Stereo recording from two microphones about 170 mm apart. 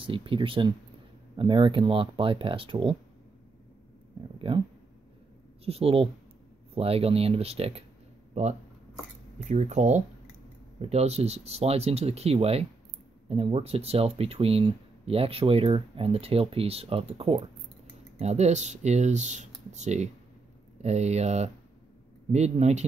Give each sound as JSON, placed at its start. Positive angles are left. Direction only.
{"t": 0.0, "sound": "speech", "side_deg": -30}
{"t": 5.7, "sound": "speech", "side_deg": -35}
{"t": 9.4, "sound": "speech", "side_deg": -45}